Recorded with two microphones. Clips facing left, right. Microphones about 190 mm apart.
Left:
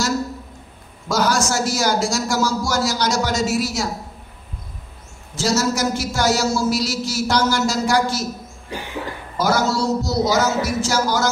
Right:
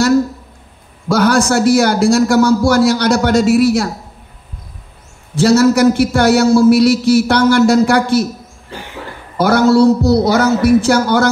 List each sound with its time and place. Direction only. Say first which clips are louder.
1.1 s a man's voice: right 7 dB; 60° right (ahead or behind)
5.3 s a man's voice: right 10 dB; 60° right (ahead or behind)
8.7 s cough: even; 15° left (ahead or behind)
9.4 s a man's voice: right 10 dB; 60° right (ahead or behind)